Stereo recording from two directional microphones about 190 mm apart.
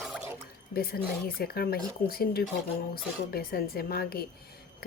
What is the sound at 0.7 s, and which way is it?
A woman's voice, 55° left (ahead or behind).